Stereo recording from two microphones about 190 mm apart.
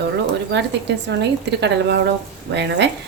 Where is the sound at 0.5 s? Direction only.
65° right (ahead or behind).